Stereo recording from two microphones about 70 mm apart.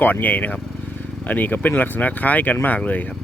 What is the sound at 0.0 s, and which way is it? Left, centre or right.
Speech, left.